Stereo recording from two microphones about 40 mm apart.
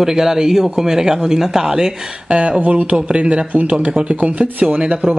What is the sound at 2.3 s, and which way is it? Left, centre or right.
Speech, right.